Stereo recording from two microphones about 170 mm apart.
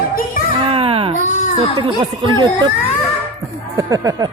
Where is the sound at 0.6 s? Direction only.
35° right (ahead or behind).